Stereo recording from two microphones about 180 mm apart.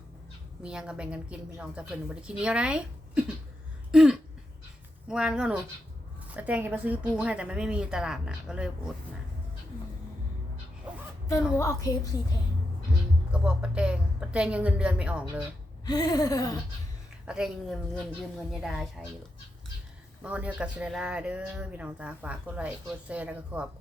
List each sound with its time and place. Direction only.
0.6 s a woman's voice: 5° right (ahead or behind)
3.9 s throat clearing: 5° right (ahead or behind)
5.0 s a woman's voice: 5° right (ahead or behind)
11.5 s a woman's voice: 20° left (ahead or behind)
13.3 s a woman's voice: 5° right (ahead or behind)
15.9 s a sound: 20° left (ahead or behind)
17.2 s a woman's voice: 5° right (ahead or behind)
20.2 s speech: 5° right (ahead or behind)